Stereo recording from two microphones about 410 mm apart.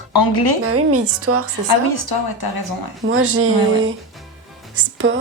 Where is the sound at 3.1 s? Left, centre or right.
Right.